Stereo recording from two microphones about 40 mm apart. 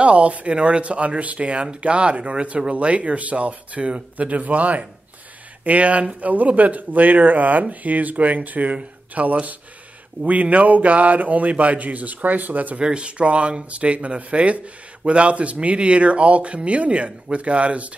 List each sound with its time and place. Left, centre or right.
0.0 s speech: right
12.8 s speech: right